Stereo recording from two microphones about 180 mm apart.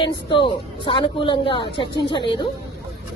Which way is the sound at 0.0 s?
25° left (ahead or behind).